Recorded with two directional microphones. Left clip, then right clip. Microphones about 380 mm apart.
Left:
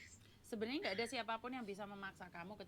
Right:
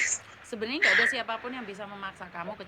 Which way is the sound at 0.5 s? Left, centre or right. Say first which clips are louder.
Right 18 dB; left.